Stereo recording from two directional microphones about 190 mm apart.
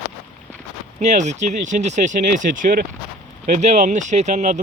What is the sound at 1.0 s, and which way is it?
Speech, 40° right (ahead or behind).